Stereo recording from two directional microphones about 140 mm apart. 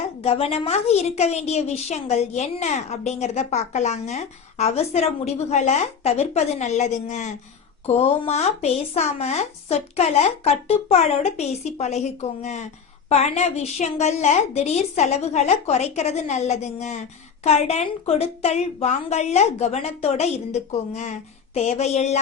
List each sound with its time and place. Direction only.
0.2 s a woman's voice: 45° left (ahead or behind)
7.9 s a woman's voice: 45° left (ahead or behind)